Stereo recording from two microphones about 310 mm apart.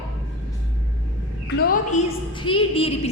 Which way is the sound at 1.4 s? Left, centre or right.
Left.